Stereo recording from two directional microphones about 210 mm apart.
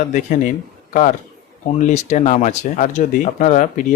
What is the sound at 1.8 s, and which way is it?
Speech, 35° left (ahead or behind).